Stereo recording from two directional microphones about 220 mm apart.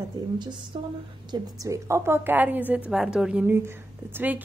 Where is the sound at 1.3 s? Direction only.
15° right (ahead or behind).